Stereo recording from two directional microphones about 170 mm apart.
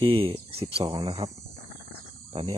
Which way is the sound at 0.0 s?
30° right (ahead or behind).